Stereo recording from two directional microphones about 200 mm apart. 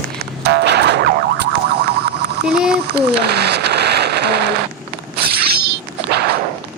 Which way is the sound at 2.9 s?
55° right (ahead or behind).